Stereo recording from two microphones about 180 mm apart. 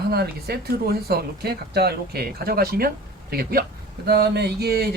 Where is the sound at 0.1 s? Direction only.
60° right (ahead or behind).